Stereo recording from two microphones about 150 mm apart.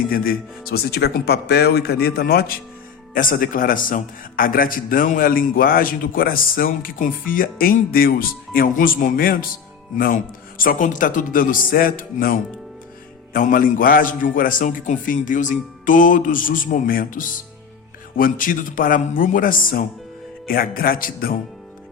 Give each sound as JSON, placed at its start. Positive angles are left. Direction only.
{"t": 0.1, "sound": "speech", "side_deg": 85}
{"t": 3.2, "sound": "a man's voice", "side_deg": 65}
{"t": 10.6, "sound": "a man's voice", "side_deg": 65}
{"t": 20.5, "sound": "a man's voice", "side_deg": 80}